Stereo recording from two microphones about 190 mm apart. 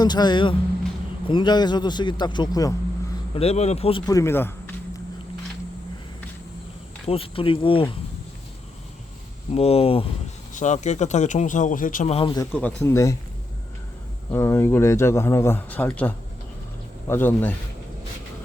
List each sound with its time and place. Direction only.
0.0 s speech: 20° left (ahead or behind)
3.3 s speech: 35° left (ahead or behind); by 5.0 s 10° left (ahead or behind)
7.1 s speech: 30° left (ahead or behind)
9.5 s speech: 30° left (ahead or behind)
12.6 s a man's voice: 15° left (ahead or behind)
14.3 s a man's voice: 15° left (ahead or behind)